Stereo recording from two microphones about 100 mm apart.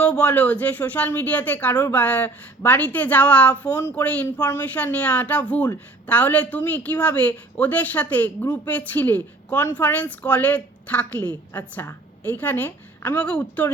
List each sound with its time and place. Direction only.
0.0 s speech: 15° left (ahead or behind)